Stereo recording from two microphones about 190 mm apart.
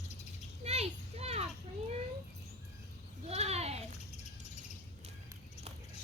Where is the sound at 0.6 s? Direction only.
35° right (ahead or behind).